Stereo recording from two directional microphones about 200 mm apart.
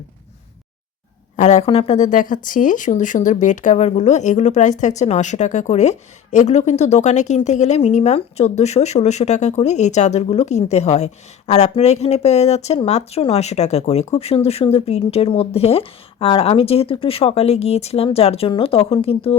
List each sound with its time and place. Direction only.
1.4 s speech: 35° left (ahead or behind)